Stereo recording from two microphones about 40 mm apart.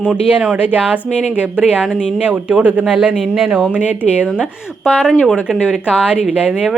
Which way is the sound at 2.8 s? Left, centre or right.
Right.